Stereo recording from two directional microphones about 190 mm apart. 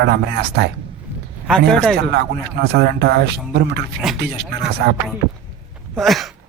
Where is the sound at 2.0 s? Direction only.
60° right (ahead or behind).